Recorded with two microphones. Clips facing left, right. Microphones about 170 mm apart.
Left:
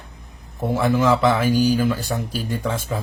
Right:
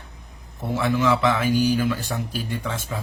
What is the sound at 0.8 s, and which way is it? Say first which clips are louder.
A man's voice: left 3 dB; 40° left (ahead or behind).